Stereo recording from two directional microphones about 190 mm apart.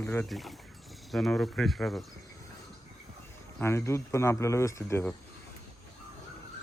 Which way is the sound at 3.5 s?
15° left (ahead or behind).